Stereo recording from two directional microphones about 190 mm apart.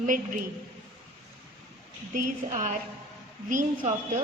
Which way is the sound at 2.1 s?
40° right (ahead or behind).